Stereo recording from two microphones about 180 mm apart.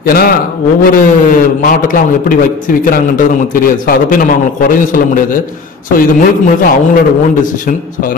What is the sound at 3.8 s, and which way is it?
Speech, 50° left (ahead or behind).